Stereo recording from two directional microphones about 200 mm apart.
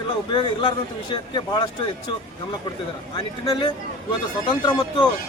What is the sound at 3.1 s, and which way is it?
Speech, 25° left (ahead or behind).